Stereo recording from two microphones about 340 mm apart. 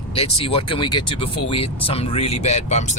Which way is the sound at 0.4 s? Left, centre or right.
Centre.